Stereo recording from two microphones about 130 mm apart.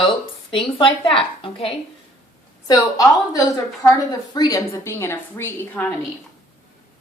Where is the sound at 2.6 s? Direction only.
30° left (ahead or behind).